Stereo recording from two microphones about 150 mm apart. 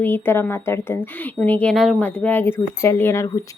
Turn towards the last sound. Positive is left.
turn(degrees=15)  # may be behind; listen again after turning